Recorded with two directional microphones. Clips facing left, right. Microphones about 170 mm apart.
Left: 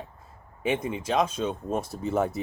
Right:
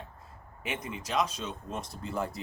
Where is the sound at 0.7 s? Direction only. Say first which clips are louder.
Left 7 dB; 25° left (ahead or behind).